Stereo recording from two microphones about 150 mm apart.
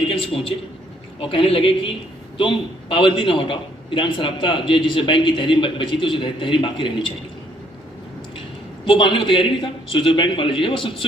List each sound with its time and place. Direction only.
0.0 s a man's voice: 35° left (ahead or behind)
8.8 s a man's voice: 35° left (ahead or behind)